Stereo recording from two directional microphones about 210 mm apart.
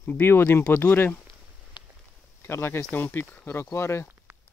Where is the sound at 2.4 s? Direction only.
10° left (ahead or behind).